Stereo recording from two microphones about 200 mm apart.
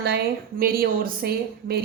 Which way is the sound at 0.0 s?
50° right (ahead or behind).